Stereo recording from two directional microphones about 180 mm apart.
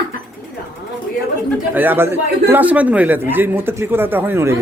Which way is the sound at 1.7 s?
10° right (ahead or behind).